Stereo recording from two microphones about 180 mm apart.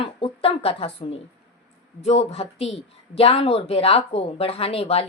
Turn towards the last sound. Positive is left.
turn(degrees=35)  # may be behind; listen again after turning